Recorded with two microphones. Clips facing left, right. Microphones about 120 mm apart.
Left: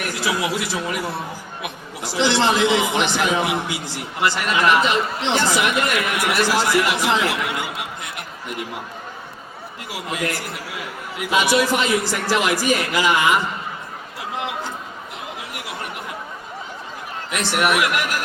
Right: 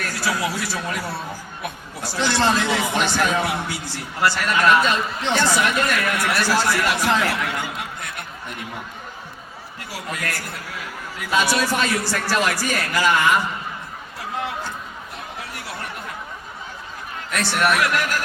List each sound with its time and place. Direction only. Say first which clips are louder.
0.0 s a man's voice: left 1 dB; 15° left (ahead or behind)
9.9 s a man's voice: left 4 dB; 20° left (ahead or behind)
17.3 s a man's voice: left 1 dB; 15° left (ahead or behind)